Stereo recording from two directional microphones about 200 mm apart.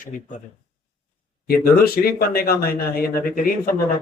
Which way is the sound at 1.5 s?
45° left (ahead or behind).